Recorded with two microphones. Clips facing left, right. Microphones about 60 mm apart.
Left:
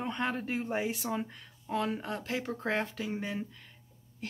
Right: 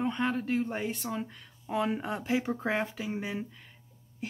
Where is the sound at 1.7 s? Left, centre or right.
Centre.